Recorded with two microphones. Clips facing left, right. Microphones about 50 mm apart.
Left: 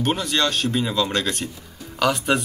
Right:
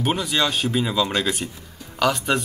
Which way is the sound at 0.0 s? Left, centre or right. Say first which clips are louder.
Even; centre.